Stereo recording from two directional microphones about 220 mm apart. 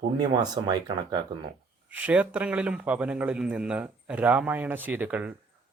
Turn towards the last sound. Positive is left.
turn(degrees=-5)  # may be behind; listen again after turning